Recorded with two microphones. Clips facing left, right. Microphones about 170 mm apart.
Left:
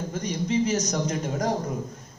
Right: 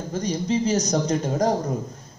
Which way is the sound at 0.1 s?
35° right (ahead or behind).